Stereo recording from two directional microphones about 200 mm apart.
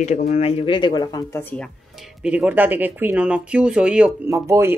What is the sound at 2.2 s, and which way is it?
Speech, 5° right (ahead or behind).